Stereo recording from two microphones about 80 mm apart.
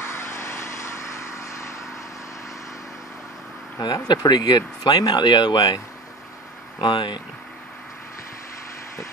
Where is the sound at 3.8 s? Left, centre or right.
Left.